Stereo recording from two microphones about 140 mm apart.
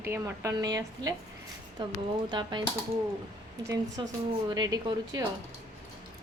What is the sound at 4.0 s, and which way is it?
A woman's voice, 35° right (ahead or behind).